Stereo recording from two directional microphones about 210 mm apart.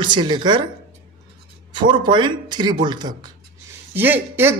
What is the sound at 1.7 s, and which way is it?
Speech, 20° right (ahead or behind).